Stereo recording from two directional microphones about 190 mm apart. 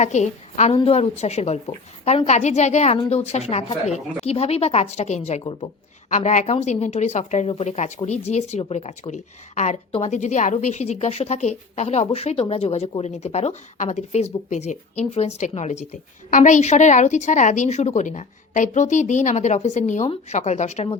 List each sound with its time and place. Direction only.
0.0 s speech: 35° left (ahead or behind)